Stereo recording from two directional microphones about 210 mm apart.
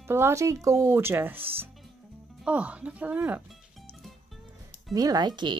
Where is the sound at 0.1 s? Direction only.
15° right (ahead or behind).